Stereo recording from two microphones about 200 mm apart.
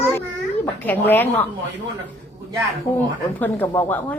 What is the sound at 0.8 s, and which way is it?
Speech, 10° left (ahead or behind).